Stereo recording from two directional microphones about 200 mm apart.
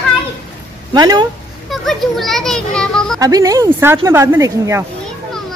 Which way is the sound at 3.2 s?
15° right (ahead or behind).